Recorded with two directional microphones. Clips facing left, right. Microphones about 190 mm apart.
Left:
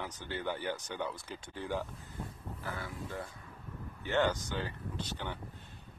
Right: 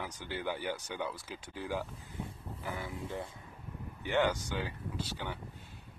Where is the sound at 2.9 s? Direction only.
25° right (ahead or behind).